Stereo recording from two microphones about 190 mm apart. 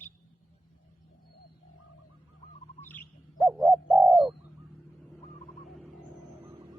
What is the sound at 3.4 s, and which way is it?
Bird, centre (ahead or behind).